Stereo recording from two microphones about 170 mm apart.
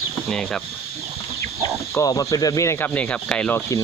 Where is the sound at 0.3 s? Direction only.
5° left (ahead or behind).